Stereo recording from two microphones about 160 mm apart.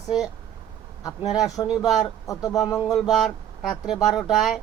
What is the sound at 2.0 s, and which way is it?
Speech, 20° left (ahead or behind).